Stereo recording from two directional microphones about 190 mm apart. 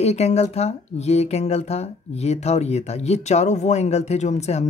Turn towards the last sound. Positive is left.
turn(degrees=35)  # may be behind; listen again after turning